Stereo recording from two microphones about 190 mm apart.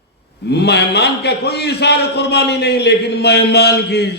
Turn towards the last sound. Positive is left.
turn(degrees=60)  # may be behind; listen again after turning